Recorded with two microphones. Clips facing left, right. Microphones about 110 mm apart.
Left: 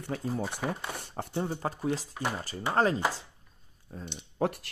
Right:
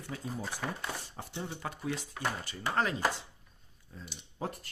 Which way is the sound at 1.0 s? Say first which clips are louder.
Left 8 dB; 55° left (ahead or behind).